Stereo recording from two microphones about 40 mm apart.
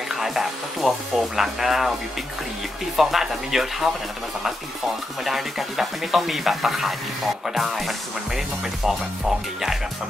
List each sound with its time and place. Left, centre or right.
0.1 s speech: centre
3.0 s speech: centre
5.2 s speech: centre